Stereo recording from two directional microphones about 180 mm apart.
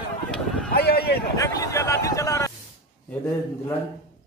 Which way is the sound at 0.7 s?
60° left (ahead or behind).